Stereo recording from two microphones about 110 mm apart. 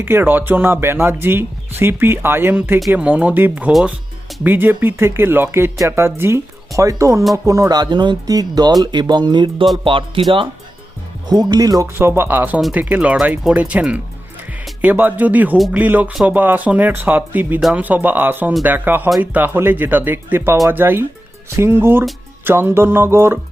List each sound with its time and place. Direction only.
0.0 s speech: 20° right (ahead or behind)
3.7 s speech: centre (ahead or behind)
4.4 s speech: 15° right (ahead or behind); by 10.2 s 50° right (ahead or behind)
11.3 s speech: 40° right (ahead or behind)
11.9 s speech: 20° right (ahead or behind)